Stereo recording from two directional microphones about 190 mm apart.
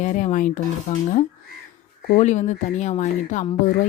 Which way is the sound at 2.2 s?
40° left (ahead or behind).